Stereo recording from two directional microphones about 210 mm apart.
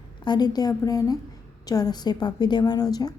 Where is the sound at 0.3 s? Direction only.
20° left (ahead or behind).